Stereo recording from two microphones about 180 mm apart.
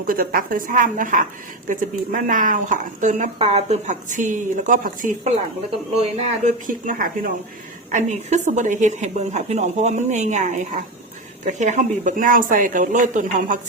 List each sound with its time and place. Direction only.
0.0 s a woman's voice: 50° right (ahead or behind)